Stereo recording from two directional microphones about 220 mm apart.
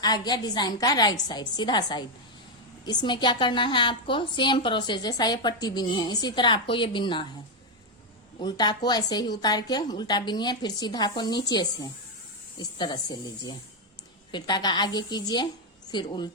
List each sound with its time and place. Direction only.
0.0 s a woman's voice: 20° left (ahead or behind)
8.4 s a woman's voice: 20° left (ahead or behind)